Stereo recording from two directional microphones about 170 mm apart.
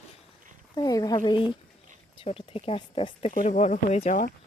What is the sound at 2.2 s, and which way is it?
Speech, 35° left (ahead or behind).